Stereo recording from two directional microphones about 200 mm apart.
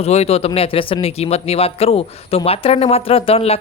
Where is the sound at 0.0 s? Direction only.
30° left (ahead or behind).